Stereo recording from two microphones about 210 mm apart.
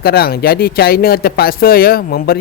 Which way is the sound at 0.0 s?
45° left (ahead or behind).